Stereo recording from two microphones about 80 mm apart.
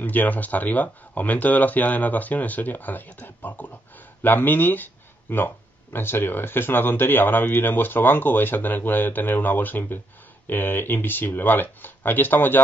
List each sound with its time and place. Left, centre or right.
0.0 s speech: left